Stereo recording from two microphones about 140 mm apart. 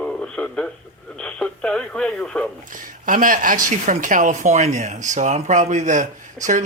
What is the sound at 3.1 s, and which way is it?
Speech, 75° right (ahead or behind).